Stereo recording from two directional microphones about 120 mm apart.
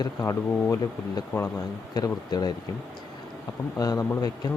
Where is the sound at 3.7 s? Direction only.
30° left (ahead or behind).